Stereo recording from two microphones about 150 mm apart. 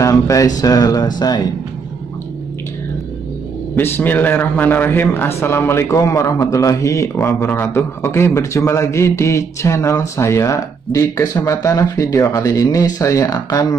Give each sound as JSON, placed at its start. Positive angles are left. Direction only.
{"t": 0.0, "sound": "a sound", "side_deg": 20}
{"t": 0.6, "sound": "a man's voice", "side_deg": 25}
{"t": 3.7, "sound": "a man's voice", "side_deg": 15}